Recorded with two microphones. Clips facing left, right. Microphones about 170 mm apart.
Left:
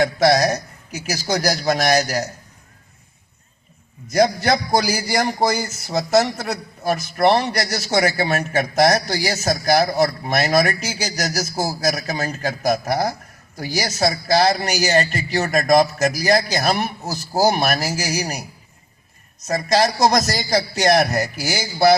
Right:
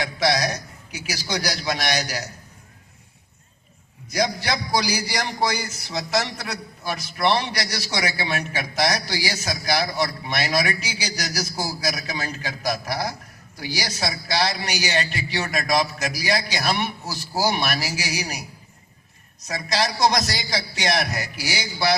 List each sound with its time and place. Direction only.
0.0 s a man's voice: 45° left (ahead or behind)
0.9 s a man's voice: centre (ahead or behind)
1.1 s a man's voice: 45° left (ahead or behind)
4.4 s a man's voice: 45° left (ahead or behind)
19.5 s a man's voice: 45° left (ahead or behind)